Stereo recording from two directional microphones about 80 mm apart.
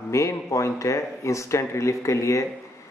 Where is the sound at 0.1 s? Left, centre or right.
Left.